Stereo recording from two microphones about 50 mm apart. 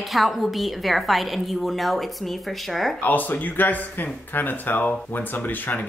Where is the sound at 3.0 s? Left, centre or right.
Left.